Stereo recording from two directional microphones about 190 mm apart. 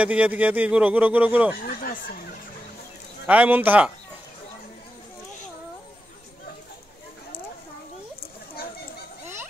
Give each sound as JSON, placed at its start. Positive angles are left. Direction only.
{"t": 0.0, "sound": "speech", "side_deg": -5}
{"t": 1.8, "sound": "speech", "side_deg": 45}
{"t": 3.3, "sound": "speech", "side_deg": -10}